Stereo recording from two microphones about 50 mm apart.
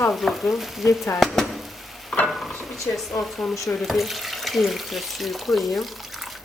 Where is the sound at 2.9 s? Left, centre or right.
Centre.